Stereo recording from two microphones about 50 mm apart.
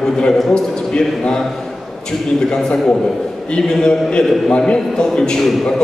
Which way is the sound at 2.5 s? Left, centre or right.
Centre.